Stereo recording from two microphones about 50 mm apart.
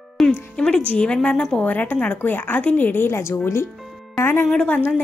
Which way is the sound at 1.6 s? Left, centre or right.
Left.